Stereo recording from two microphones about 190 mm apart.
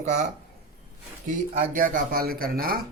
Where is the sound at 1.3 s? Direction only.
45° right (ahead or behind).